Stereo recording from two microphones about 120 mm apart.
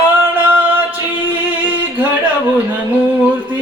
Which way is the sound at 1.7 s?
15° right (ahead or behind).